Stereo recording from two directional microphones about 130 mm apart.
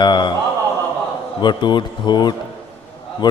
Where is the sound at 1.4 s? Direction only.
35° left (ahead or behind).